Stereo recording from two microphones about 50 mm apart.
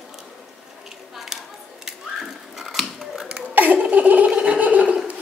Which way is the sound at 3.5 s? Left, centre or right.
Right.